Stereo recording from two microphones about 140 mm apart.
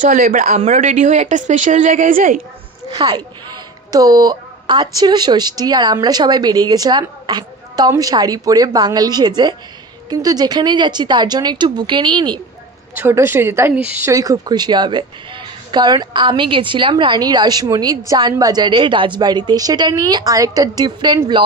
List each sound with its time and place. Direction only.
0.0 s speech: 75° right (ahead or behind)
3.0 s a woman's voice: 35° right (ahead or behind)
12.9 s a woman's voice: 15° right (ahead or behind)
14.1 s a woman's voice: 25° right (ahead or behind)